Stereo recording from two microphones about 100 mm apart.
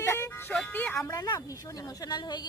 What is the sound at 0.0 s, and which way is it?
Music, 25° left (ahead or behind).